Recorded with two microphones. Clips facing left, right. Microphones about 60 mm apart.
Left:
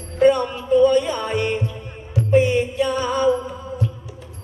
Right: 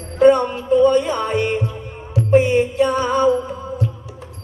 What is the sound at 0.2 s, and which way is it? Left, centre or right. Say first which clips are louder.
Music: right 3 dB; right.